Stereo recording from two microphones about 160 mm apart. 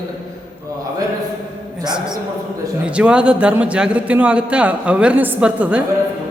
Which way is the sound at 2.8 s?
5° right (ahead or behind).